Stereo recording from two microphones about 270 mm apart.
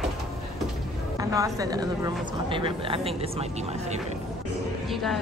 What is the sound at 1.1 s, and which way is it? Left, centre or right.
Speech, centre.